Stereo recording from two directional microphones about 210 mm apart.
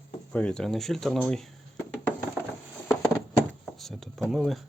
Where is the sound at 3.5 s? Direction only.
Centre (ahead or behind).